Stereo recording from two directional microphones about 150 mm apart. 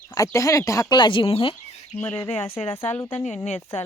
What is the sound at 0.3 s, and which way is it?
Speech, 20° left (ahead or behind).